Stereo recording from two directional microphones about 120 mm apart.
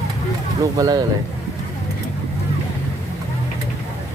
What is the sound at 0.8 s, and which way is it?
Speech, 35° right (ahead or behind).